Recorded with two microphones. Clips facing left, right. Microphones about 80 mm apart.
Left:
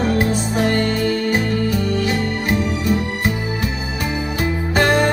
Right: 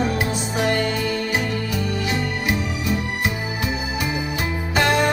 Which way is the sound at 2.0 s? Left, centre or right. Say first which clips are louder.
Left 3 dB; left.